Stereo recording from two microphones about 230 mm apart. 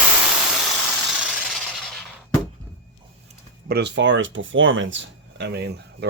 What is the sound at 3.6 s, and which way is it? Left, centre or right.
Speech, right.